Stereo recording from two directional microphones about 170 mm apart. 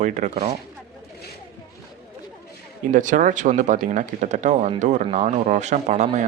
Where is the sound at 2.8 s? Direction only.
50° right (ahead or behind).